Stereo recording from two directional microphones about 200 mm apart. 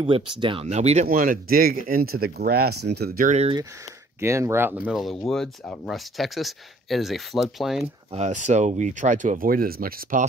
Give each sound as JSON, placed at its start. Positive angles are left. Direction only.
{"t": 0.0, "sound": "speech", "side_deg": -25}
{"t": 1.0, "sound": "speech", "side_deg": -45}
{"t": 3.3, "sound": "speech", "side_deg": -35}
{"t": 4.2, "sound": "speech", "side_deg": -15}
{"t": 8.1, "sound": "speech", "side_deg": -35}